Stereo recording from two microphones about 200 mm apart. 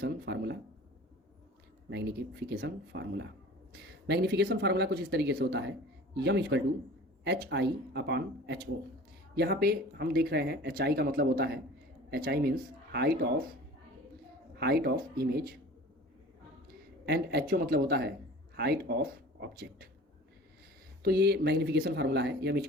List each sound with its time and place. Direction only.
0.0 s speech: 55° right (ahead or behind)
1.9 s speech: 55° right (ahead or behind)
14.6 s speech: 50° right (ahead or behind)
17.1 s speech: 50° right (ahead or behind)
21.0 s speech: 55° right (ahead or behind)